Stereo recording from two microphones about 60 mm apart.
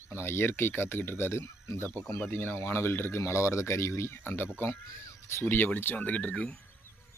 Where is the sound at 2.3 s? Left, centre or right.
Left.